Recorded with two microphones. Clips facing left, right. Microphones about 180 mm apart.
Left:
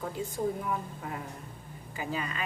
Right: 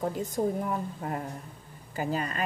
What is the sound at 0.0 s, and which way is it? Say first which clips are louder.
A woman's voice: right 4 dB; 40° right (ahead or behind).